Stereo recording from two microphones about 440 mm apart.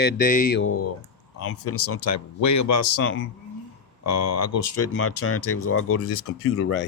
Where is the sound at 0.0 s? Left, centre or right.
Centre.